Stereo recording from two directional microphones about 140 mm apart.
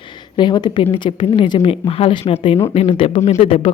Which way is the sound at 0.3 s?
30° left (ahead or behind).